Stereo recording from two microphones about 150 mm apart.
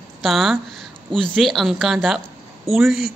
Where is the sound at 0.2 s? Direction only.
Centre (ahead or behind).